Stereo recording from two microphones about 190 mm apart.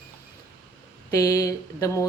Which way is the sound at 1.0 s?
15° left (ahead or behind).